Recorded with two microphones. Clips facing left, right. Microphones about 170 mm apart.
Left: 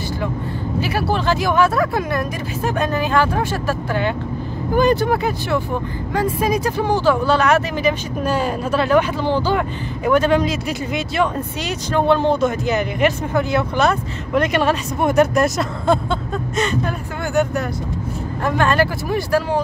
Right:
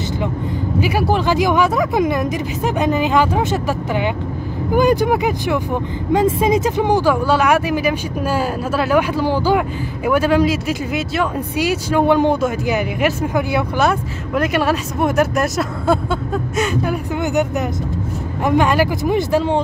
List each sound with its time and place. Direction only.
0.7 s speech: 15° right (ahead or behind)
17.3 s speech: 20° right (ahead or behind)